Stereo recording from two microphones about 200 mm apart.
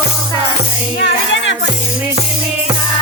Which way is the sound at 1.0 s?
65° left (ahead or behind).